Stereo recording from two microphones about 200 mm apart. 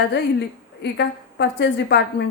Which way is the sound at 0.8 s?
60° left (ahead or behind).